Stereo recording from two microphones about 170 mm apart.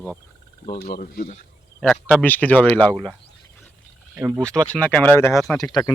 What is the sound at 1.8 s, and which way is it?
Speech, 5° left (ahead or behind).